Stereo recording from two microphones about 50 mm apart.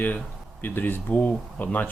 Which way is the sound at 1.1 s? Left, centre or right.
Left.